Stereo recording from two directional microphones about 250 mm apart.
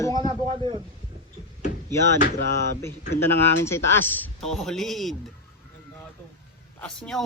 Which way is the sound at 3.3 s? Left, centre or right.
Centre.